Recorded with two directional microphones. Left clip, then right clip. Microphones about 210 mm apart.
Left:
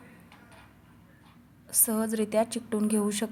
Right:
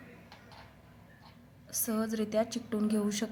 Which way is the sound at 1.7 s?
20° left (ahead or behind).